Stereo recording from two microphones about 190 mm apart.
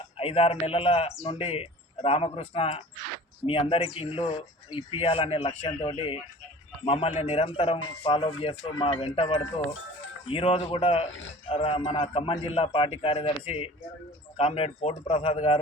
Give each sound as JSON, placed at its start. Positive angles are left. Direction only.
{"t": 0.2, "sound": "a man's voice", "side_deg": 30}